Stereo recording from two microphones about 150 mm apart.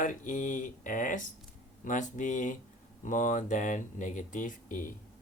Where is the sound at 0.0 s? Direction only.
60° left (ahead or behind).